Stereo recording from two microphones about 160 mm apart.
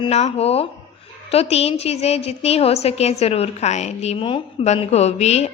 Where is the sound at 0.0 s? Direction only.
45° left (ahead or behind).